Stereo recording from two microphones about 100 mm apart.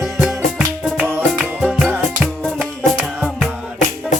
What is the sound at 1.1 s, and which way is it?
Music, 20° right (ahead or behind).